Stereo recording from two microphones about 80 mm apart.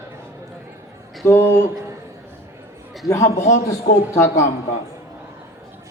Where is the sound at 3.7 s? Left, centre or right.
Left.